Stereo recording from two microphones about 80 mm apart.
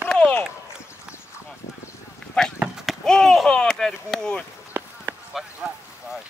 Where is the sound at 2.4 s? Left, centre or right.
Centre.